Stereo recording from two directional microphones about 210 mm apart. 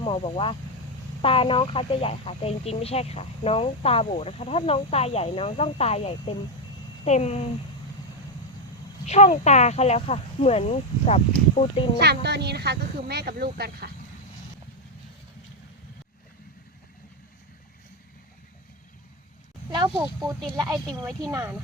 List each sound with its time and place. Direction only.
0.0 s speech: 25° left (ahead or behind)
9.0 s speech: 30° left (ahead or behind)
11.9 s speech: 50° right (ahead or behind)
21.2 s speech: 15° right (ahead or behind)